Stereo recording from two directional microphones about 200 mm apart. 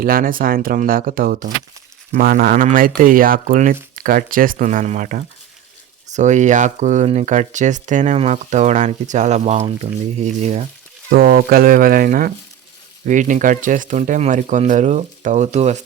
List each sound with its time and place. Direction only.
0.0 s speech: 45° right (ahead or behind)
11.1 s speech: 55° right (ahead or behind); by 15.8 s 35° right (ahead or behind)